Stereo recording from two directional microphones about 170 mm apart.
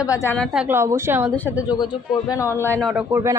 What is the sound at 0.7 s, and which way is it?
Speech, 15° right (ahead or behind).